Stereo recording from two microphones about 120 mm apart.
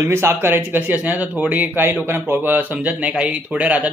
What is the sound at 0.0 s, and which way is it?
Speech, 20° right (ahead or behind).